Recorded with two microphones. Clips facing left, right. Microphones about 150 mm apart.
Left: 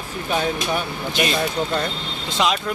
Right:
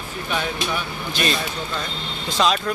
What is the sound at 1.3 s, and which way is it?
Speech, 50° left (ahead or behind).